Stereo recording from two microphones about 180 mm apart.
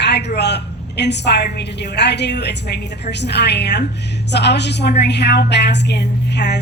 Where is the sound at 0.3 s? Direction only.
70° left (ahead or behind).